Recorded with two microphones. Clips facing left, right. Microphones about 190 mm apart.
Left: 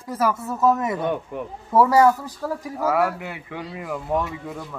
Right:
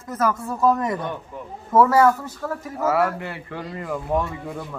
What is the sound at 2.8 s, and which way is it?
A man's voice, centre (ahead or behind).